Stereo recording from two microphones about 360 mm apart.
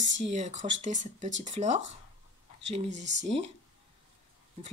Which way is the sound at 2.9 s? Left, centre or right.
Right.